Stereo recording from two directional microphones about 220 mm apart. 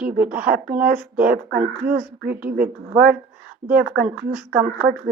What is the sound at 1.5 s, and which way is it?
Speech, 40° right (ahead or behind).